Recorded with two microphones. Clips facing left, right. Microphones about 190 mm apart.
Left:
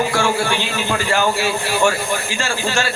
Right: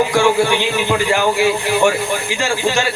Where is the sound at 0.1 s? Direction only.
15° right (ahead or behind).